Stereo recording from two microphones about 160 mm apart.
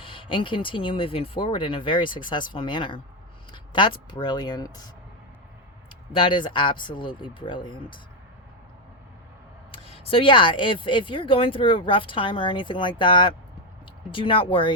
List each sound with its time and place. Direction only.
0.0 s speech: 35° left (ahead or behind)
6.1 s speech: 30° left (ahead or behind)
9.7 s speech: 35° left (ahead or behind)